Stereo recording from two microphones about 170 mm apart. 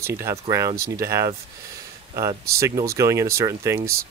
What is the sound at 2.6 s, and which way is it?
Speech, 20° right (ahead or behind).